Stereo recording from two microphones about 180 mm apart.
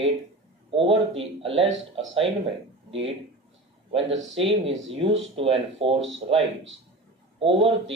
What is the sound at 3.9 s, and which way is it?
Speech, 35° right (ahead or behind).